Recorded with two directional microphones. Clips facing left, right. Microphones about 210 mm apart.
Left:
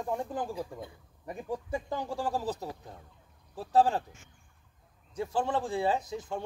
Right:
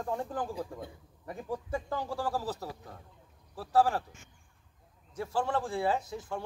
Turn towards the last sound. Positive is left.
turn(degrees=15)  # may be behind; listen again after turning